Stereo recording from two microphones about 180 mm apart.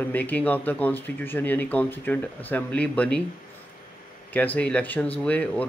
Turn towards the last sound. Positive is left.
turn(degrees=5)  # may be behind; listen again after turning